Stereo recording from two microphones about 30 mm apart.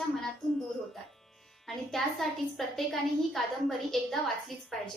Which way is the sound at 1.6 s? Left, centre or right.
Centre.